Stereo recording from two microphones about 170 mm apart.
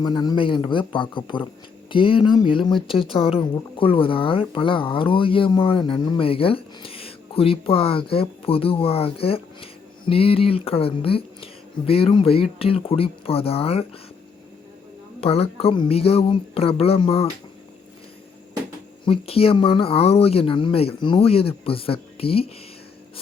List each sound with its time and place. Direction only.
0.0 s speech: 25° left (ahead or behind)
15.2 s speech: 35° left (ahead or behind)
19.0 s speech: 35° left (ahead or behind)